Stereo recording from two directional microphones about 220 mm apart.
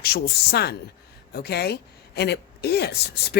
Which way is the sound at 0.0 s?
45° left (ahead or behind).